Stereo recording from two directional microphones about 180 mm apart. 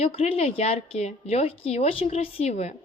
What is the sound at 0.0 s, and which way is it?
A woman's voice, 30° left (ahead or behind).